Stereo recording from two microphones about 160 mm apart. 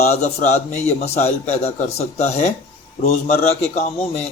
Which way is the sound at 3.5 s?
40° left (ahead or behind).